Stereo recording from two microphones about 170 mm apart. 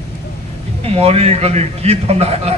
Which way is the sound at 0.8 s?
35° right (ahead or behind).